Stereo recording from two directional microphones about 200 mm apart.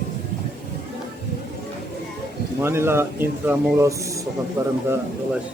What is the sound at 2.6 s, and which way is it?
Speech, 10° right (ahead or behind).